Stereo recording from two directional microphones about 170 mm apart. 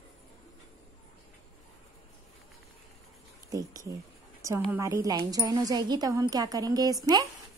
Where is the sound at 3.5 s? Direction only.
20° right (ahead or behind).